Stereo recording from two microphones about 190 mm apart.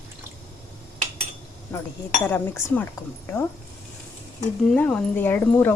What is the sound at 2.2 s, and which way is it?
Speech, 10° left (ahead or behind).